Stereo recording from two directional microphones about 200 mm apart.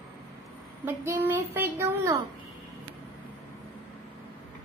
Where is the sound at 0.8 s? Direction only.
10° right (ahead or behind).